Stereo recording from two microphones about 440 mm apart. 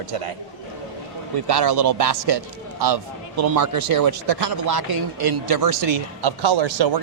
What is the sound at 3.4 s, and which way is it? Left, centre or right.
Speech, right.